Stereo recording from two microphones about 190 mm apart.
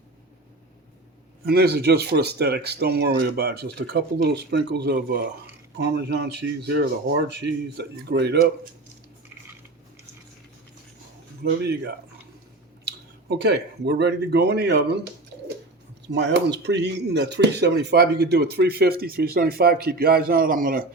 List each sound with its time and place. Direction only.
1.5 s speech: 55° right (ahead or behind)
11.4 s speech: 60° right (ahead or behind)
13.2 s speech: 60° right (ahead or behind)
16.0 s speech: 65° right (ahead or behind)